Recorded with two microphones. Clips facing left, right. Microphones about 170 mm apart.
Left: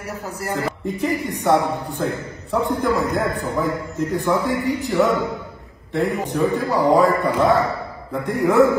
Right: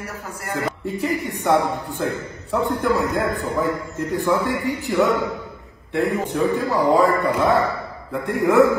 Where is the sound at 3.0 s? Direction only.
15° left (ahead or behind).